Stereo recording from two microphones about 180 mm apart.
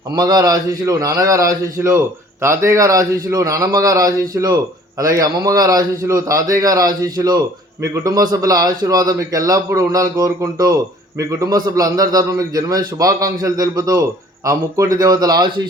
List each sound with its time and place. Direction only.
0.1 s a man's voice: 20° right (ahead or behind)